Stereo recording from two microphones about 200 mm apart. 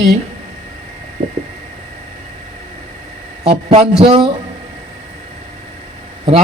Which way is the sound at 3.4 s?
30° right (ahead or behind).